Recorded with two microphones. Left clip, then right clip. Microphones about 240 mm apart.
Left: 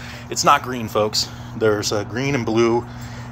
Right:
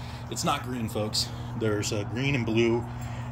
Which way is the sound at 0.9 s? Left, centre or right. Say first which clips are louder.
Left 11 dB; centre.